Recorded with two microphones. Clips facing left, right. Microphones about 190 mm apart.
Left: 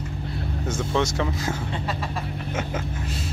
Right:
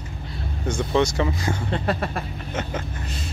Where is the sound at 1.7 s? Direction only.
55° right (ahead or behind).